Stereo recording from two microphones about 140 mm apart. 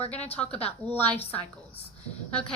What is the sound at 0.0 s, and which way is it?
Speech, 45° left (ahead or behind).